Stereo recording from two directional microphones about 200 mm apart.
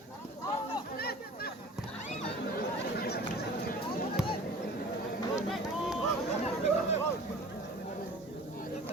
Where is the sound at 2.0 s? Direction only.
35° left (ahead or behind).